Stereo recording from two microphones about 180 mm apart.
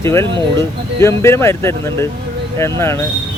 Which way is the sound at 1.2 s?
15° left (ahead or behind).